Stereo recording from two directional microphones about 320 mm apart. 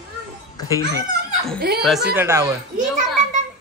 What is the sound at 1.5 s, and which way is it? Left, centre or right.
Speech, right.